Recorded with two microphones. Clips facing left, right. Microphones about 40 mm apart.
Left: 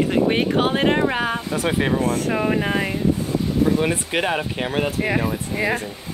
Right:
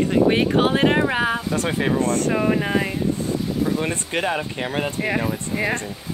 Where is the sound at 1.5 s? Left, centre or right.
Centre.